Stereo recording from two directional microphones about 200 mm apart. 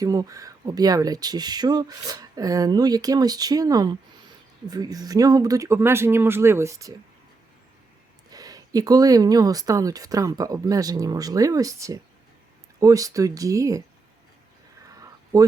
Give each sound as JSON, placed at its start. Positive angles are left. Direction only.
{"t": 0.0, "sound": "speech", "side_deg": -15}
{"t": 8.3, "sound": "speech", "side_deg": -20}
{"t": 14.8, "sound": "a sound", "side_deg": -15}